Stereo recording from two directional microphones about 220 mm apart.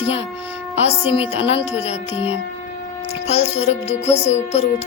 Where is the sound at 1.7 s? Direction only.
30° left (ahead or behind).